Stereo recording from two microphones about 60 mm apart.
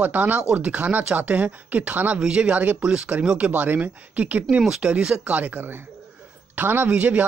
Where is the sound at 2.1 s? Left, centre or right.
Centre.